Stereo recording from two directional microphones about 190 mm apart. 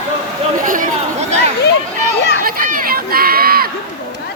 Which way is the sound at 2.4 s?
45° right (ahead or behind).